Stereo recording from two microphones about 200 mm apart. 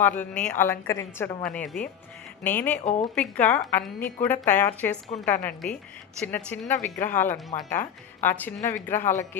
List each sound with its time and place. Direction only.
0.0 s a woman's voice: 5° left (ahead or behind)
1.5 s a woman's voice: 5° left (ahead or behind)